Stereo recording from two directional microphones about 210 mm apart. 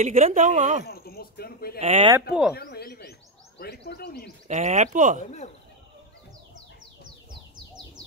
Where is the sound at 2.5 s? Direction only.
50° left (ahead or behind).